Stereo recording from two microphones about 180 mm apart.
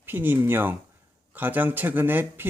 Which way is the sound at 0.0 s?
10° right (ahead or behind).